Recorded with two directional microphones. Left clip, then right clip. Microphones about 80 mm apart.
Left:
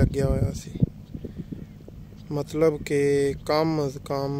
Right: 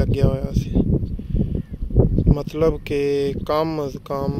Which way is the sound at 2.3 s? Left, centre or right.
Centre.